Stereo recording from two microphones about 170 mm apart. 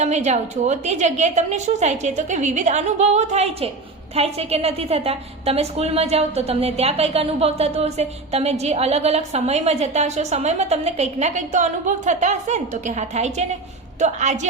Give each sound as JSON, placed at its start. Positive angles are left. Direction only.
{"t": 0.0, "sound": "a woman's voice", "side_deg": -40}